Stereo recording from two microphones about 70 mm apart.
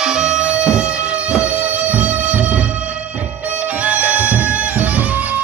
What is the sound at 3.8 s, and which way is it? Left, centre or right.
Music, right.